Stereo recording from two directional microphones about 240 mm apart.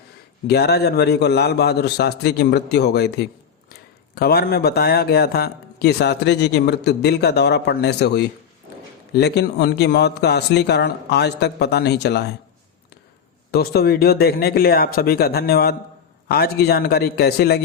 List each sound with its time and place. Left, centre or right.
0.4 s speech: left
13.5 s speech: left